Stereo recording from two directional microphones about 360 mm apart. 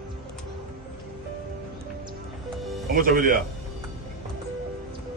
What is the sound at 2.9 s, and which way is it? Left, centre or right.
Speech, right.